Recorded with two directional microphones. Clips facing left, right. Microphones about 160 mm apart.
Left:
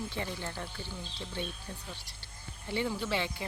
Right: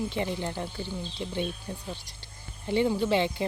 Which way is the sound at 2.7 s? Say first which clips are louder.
Right 8 dB; 25° right (ahead or behind).